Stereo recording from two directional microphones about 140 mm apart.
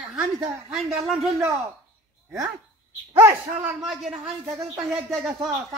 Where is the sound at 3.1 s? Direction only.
15° right (ahead or behind).